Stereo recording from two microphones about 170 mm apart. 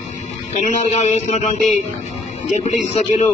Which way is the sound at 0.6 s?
45° left (ahead or behind).